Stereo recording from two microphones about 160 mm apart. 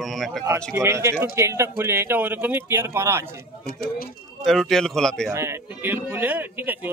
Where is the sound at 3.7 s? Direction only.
75° left (ahead or behind).